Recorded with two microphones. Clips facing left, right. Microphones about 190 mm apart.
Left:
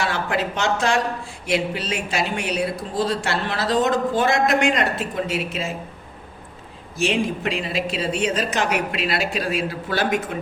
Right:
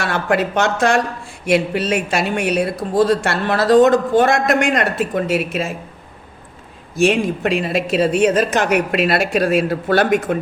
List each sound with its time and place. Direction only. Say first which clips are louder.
0.0 s speech: right 5 dB; 55° right (ahead or behind)
7.0 s speech: right 6 dB; 55° right (ahead or behind)